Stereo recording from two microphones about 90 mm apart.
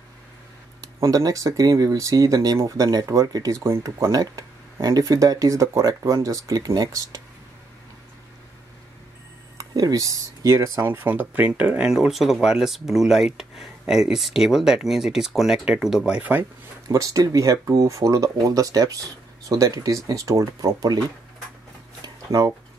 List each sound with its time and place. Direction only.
1.0 s speech: 35° right (ahead or behind)
9.6 s speech: 45° right (ahead or behind); by 16.2 s 5° right (ahead or behind)
16.2 s speech: 20° right (ahead or behind)
16.8 s speech: 40° right (ahead or behind)
22.0 s a sound: 45° right (ahead or behind)